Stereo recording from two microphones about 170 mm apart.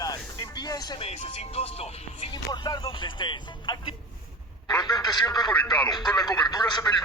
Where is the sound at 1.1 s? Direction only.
35° left (ahead or behind).